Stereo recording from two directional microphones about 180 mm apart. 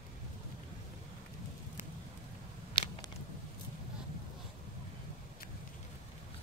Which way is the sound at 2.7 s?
25° left (ahead or behind).